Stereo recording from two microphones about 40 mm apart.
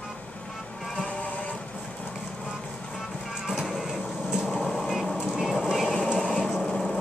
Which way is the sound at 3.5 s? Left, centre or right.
Centre.